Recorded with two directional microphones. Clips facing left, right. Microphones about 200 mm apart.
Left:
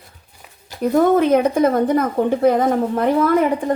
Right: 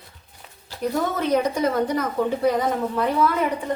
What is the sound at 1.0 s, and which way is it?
Speech, 55° left (ahead or behind).